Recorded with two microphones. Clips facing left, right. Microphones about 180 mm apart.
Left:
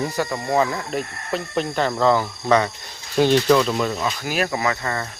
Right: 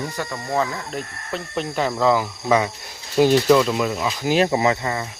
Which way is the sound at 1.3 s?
Centre (ahead or behind).